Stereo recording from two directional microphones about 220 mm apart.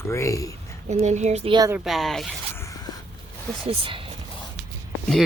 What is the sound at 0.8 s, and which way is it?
Speech, 30° right (ahead or behind).